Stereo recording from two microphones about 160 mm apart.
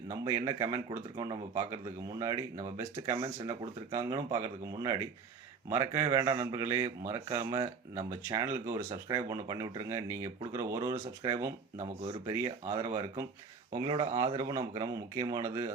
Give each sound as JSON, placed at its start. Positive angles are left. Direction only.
{"t": 0.1, "sound": "speech", "side_deg": -25}
{"t": 13.7, "sound": "speech", "side_deg": -30}